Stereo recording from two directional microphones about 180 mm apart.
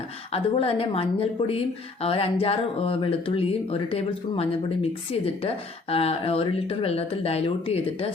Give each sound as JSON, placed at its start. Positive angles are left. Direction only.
{"t": 0.3, "sound": "a woman's voice", "side_deg": 30}